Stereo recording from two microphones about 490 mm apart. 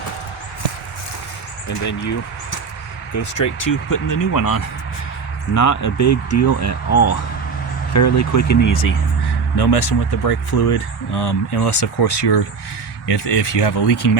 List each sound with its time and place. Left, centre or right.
1.6 s speech: left
3.2 s speech: left
9.6 s speech: left